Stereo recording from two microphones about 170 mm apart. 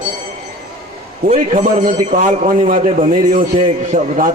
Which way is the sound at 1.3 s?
50° right (ahead or behind).